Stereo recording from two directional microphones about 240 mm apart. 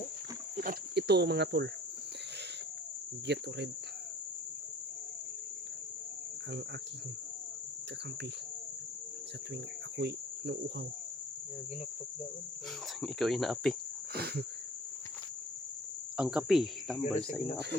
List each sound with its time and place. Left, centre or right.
0.5 s cricket: right
3.3 s cricket: right
10.0 s insect: right
13.0 s speech: centre
14.1 s wheeze: right
16.1 s speech: centre
17.0 s cricket: left